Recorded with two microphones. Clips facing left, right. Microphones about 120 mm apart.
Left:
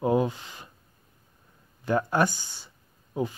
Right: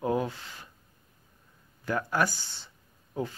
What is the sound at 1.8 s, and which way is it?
Speech, 25° left (ahead or behind).